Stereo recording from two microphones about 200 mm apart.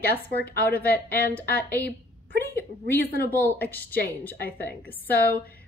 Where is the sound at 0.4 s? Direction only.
50° left (ahead or behind).